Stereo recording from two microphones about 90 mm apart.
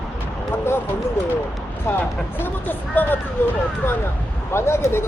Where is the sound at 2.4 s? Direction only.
20° left (ahead or behind).